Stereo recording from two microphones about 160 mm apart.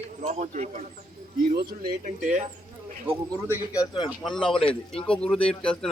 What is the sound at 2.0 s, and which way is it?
Speech, 45° right (ahead or behind).